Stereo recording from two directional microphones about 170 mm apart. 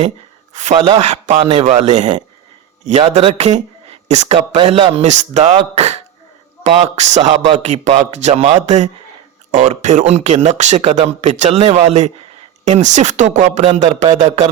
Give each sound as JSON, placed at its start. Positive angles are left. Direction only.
{"t": 0.9, "sound": "speech", "side_deg": -40}